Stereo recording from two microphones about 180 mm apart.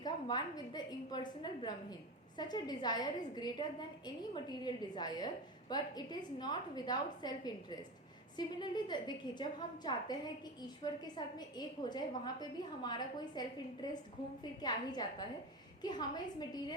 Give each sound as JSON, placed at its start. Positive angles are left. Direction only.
{"t": 0.0, "sound": "a woman's voice", "side_deg": 25}
{"t": 14.6, "sound": "a woman's voice", "side_deg": 20}